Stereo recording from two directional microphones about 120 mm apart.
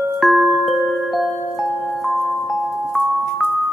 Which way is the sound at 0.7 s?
Centre (ahead or behind).